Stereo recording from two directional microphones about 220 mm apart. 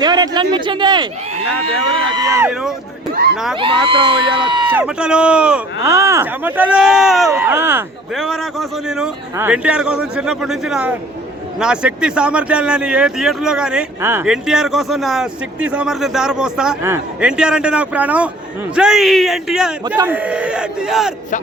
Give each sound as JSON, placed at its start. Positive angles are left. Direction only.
{"t": 0.0, "sound": "a man's voice", "side_deg": -20}
{"t": 3.1, "sound": "speech", "side_deg": -45}
{"t": 3.3, "sound": "speech", "side_deg": 0}
{"t": 3.6, "sound": "a man's voice", "side_deg": -25}
{"t": 4.7, "sound": "speech", "side_deg": -5}
{"t": 8.1, "sound": "speech", "side_deg": 0}